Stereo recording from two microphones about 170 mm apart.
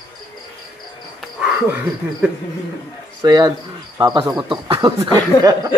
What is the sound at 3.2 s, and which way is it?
Speech, 25° right (ahead or behind).